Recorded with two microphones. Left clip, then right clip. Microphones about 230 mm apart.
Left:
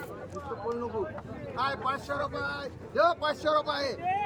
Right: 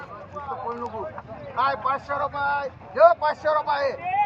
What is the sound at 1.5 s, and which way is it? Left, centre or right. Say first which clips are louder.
A man's voice: right 7 dB; centre.